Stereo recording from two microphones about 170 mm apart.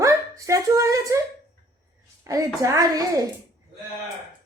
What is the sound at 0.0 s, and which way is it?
Speech, 20° right (ahead or behind).